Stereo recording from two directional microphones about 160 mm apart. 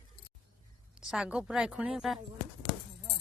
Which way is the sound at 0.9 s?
5° right (ahead or behind).